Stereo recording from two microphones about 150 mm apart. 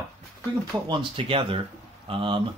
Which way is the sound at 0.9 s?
35° right (ahead or behind).